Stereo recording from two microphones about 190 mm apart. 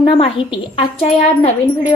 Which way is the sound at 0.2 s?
30° left (ahead or behind).